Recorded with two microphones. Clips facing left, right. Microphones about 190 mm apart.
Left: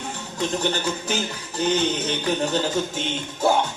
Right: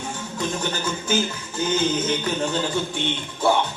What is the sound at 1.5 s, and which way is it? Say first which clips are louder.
Music: even; 35° left (ahead or behind).